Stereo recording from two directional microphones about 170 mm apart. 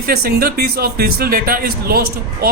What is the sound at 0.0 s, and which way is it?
A man's voice, 65° right (ahead or behind).